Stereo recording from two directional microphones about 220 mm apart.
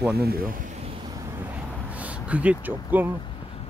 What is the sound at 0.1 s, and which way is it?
Speech, 45° right (ahead or behind).